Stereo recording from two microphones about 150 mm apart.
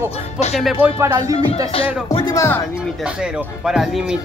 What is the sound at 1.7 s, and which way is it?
Music, 40° left (ahead or behind).